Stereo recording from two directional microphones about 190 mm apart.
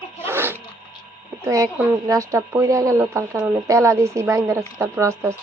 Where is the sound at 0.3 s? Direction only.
10° right (ahead or behind).